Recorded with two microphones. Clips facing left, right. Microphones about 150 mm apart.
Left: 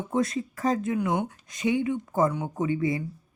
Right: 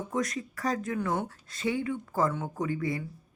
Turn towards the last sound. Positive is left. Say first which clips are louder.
# left 5 dB
turn(degrees=20)  # may be behind; listen again after turning